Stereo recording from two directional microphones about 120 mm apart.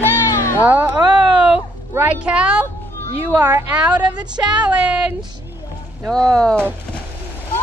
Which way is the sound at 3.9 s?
35° right (ahead or behind).